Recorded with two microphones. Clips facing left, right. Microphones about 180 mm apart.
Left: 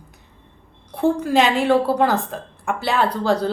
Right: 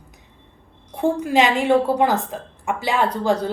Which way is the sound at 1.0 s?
15° right (ahead or behind).